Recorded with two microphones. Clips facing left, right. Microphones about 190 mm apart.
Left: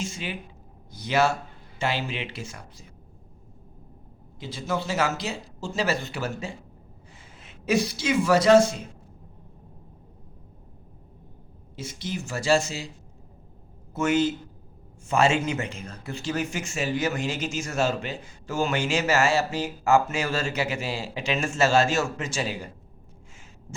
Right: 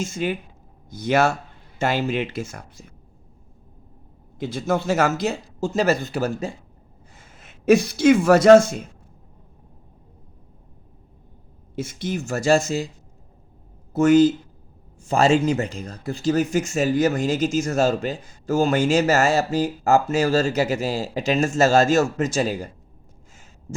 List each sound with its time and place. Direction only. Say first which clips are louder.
0.0 s speech: right 8 dB; 45° right (ahead or behind)
4.4 s a man's voice: right 6 dB; 50° right (ahead or behind)
11.8 s speech: right 6 dB; 50° right (ahead or behind)
13.9 s speech: right 8 dB; 40° right (ahead or behind)